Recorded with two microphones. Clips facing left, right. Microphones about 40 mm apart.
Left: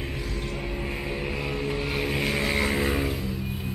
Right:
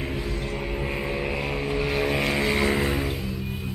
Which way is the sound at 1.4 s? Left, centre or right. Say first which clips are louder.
Right 2 dB; right.